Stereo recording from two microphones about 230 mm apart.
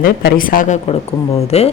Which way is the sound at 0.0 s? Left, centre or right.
Left.